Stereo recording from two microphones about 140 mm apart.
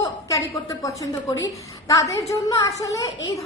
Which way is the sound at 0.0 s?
20° left (ahead or behind).